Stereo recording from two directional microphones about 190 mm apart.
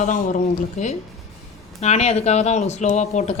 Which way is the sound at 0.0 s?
40° left (ahead or behind).